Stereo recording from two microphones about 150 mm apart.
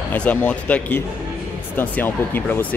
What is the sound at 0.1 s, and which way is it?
Speech, 10° left (ahead or behind).